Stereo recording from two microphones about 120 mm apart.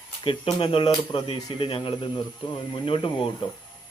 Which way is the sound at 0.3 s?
45° left (ahead or behind).